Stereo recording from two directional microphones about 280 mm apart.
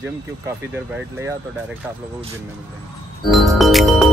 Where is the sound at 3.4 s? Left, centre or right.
Centre.